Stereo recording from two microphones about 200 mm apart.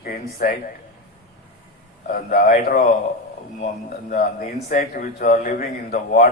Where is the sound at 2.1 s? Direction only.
45° left (ahead or behind).